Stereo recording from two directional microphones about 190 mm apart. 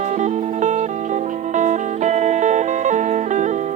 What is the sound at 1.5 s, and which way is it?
Music, 40° right (ahead or behind).